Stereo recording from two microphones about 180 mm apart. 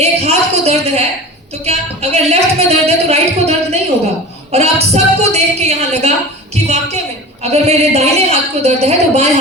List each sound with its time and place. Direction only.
0.0 s a woman's voice: 35° right (ahead or behind)